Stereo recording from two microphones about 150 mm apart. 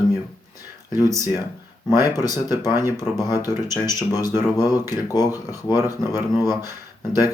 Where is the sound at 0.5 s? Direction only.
25° left (ahead or behind).